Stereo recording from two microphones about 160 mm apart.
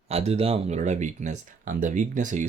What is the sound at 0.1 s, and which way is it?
Speech, 40° right (ahead or behind).